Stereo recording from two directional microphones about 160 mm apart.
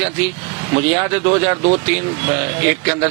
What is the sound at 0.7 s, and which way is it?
Speech, 15° right (ahead or behind).